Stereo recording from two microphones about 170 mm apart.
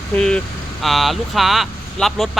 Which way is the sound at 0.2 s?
5° left (ahead or behind).